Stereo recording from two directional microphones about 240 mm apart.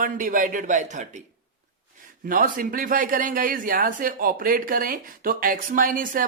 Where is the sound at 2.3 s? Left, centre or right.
Right.